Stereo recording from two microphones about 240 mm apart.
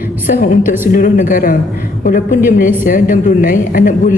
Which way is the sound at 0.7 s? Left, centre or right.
Left.